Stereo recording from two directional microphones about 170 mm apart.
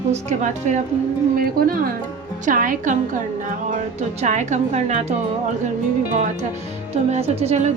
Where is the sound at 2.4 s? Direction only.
50° right (ahead or behind).